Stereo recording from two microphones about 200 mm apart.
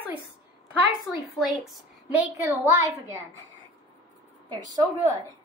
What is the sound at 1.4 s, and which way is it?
Speech, centre (ahead or behind).